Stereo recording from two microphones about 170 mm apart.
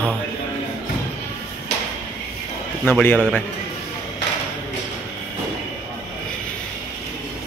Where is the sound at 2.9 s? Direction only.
5° left (ahead or behind).